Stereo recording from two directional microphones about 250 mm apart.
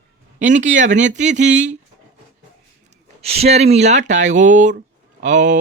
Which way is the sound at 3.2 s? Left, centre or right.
Right.